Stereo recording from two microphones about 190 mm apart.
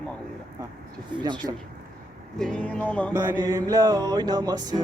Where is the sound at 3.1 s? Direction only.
15° right (ahead or behind).